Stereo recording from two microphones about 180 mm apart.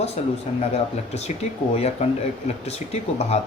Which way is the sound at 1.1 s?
35° left (ahead or behind).